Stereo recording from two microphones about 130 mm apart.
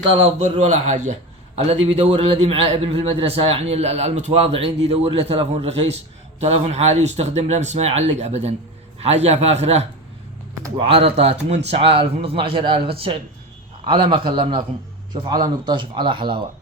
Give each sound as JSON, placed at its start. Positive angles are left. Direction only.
{"t": 0.9, "sound": "speech", "side_deg": -65}
{"t": 1.5, "sound": "a man's voice", "side_deg": -50}
{"t": 10.8, "sound": "a man's voice", "side_deg": -45}